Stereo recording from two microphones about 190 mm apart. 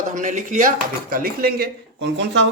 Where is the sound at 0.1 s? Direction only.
40° right (ahead or behind); by 2.2 s 60° right (ahead or behind).